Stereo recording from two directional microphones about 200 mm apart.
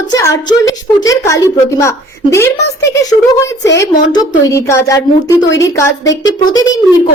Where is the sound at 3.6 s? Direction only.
60° left (ahead or behind).